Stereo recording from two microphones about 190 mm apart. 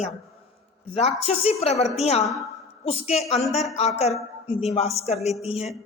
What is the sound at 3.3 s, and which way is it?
A woman's voice, 35° left (ahead or behind).